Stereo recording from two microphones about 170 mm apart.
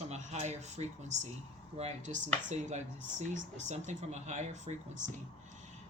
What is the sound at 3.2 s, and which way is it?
Speech, 45° right (ahead or behind).